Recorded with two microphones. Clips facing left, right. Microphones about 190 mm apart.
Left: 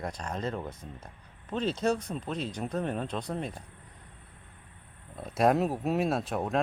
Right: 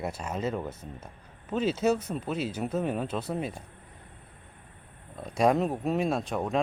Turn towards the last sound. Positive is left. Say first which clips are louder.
# right 1 dB
turn(degrees=0)  # may be behind; listen again after turning